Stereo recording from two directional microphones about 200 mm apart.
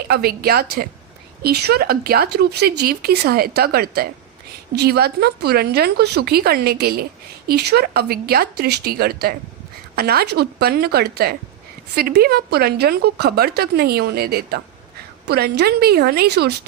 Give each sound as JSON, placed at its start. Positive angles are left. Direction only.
{"t": 0.1, "sound": "speech", "side_deg": -50}